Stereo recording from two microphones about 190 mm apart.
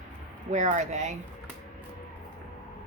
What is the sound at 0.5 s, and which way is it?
Speech, 40° right (ahead or behind).